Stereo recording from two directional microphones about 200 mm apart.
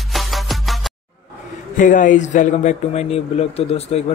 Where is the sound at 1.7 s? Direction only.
40° left (ahead or behind).